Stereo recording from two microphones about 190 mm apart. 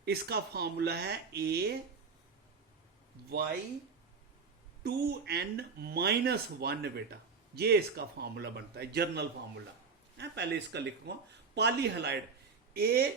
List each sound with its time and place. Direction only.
0.0 s speech: 60° right (ahead or behind)
4.8 s speech: 60° right (ahead or behind)